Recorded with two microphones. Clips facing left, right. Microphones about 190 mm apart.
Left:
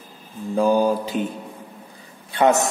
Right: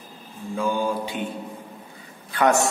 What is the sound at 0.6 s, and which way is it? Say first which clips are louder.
Mantra: left 7 dB; 40° left (ahead or behind).